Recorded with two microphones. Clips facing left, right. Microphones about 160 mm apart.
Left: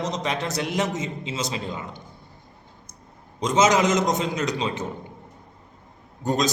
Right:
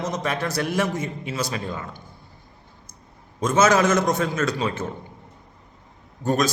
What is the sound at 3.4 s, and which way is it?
A man's voice, 20° left (ahead or behind).